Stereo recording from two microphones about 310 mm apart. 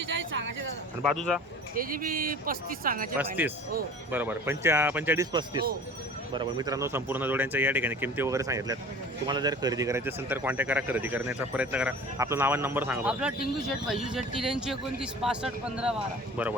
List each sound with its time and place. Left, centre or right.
0.1 s a sound: right
1.0 s speech: centre
1.7 s speech: right
3.2 s speech: centre